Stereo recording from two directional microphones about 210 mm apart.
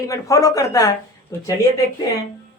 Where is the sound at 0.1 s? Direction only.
15° left (ahead or behind).